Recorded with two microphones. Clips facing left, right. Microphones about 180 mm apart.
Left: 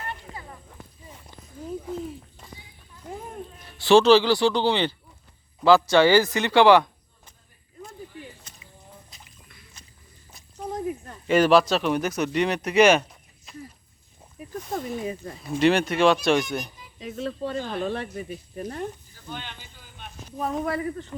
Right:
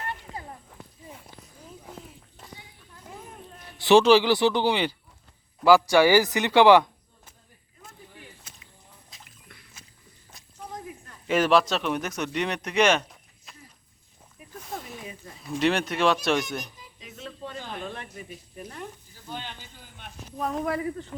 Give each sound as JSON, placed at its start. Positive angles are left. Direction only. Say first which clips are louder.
{"t": 3.1, "sound": "a sound", "louder": "left 7 dB", "side_deg": 50}
{"t": 3.8, "sound": "speech", "louder": "left 1 dB", "side_deg": -20}
{"t": 8.5, "sound": "walk", "louder": "even", "side_deg": -5}
{"t": 9.1, "sound": "a sound", "louder": "left 1 dB", "side_deg": 0}
{"t": 9.8, "sound": "walk", "louder": "even", "side_deg": -5}
{"t": 11.3, "sound": "speech", "louder": "left 3 dB", "side_deg": 0}
{"t": 14.4, "sound": "snake", "louder": "left 9 dB", "side_deg": 40}
{"t": 15.4, "sound": "speech", "louder": "left 4 dB", "side_deg": 0}
{"t": 17.0, "sound": "speech", "louder": "left 10 dB", "side_deg": 35}
{"t": 19.3, "sound": "speech", "louder": "even", "side_deg": -35}
{"t": 20.3, "sound": "speech", "louder": "left 1 dB", "side_deg": 0}
{"t": 20.7, "sound": "speech", "louder": "left 1 dB", "side_deg": -15}